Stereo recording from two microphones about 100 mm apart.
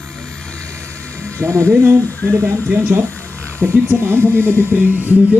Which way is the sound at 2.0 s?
15° left (ahead or behind).